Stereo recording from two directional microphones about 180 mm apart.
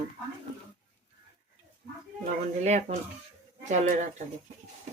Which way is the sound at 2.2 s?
40° right (ahead or behind).